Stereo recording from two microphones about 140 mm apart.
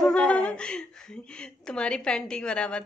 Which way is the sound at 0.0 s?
5° left (ahead or behind).